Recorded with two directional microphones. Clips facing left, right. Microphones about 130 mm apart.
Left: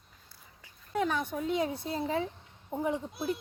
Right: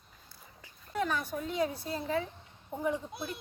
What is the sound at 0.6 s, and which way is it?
A woman's voice, 20° left (ahead or behind).